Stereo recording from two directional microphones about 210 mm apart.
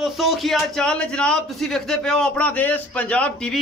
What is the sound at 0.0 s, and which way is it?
A man's voice, centre (ahead or behind).